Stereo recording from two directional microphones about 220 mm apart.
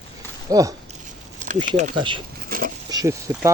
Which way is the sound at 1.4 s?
30° right (ahead or behind).